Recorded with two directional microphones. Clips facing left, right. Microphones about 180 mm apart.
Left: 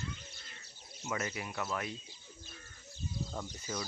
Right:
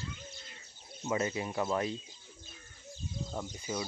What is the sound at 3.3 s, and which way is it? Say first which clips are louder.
Speech: right 3 dB; 20° right (ahead or behind).